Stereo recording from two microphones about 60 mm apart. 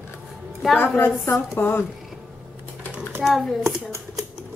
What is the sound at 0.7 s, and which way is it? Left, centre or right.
A woman's voice, left.